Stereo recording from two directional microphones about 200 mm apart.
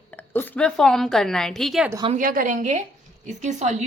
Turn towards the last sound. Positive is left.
turn(degrees=-35)  # may be behind; listen again after turning